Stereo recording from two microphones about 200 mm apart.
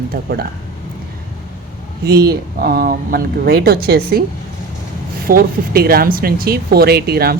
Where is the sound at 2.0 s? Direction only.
50° right (ahead or behind).